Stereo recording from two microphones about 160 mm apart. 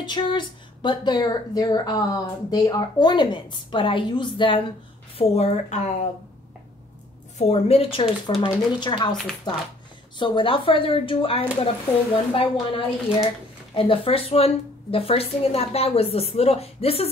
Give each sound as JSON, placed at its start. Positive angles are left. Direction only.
{"t": 0.0, "sound": "speech", "side_deg": 30}
{"t": 7.3, "sound": "a woman's voice", "side_deg": 40}
{"t": 9.1, "sound": "speech", "side_deg": 0}
{"t": 10.1, "sound": "a woman's voice", "side_deg": 30}